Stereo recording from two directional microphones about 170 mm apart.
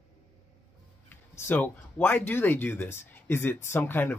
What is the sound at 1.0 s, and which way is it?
Speech, 15° left (ahead or behind).